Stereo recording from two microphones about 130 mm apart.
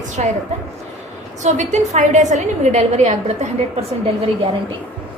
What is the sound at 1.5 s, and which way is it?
A woman's voice, 65° right (ahead or behind).